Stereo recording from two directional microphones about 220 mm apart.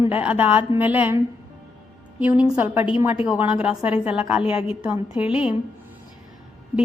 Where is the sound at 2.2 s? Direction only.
5° right (ahead or behind).